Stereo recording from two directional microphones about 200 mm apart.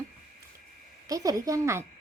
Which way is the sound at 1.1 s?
15° right (ahead or behind).